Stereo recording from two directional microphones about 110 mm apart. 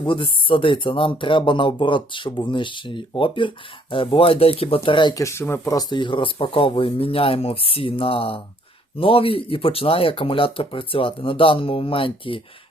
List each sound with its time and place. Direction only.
0.0 s speech: 50° left (ahead or behind)
5.1 s speech: 25° left (ahead or behind)
5.7 s speech: 45° left (ahead or behind)